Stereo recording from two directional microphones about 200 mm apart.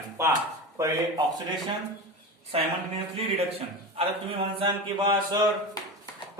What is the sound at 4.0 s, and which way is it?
Speech, 30° right (ahead or behind).